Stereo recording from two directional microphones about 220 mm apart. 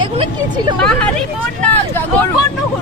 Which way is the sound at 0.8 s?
5° left (ahead or behind).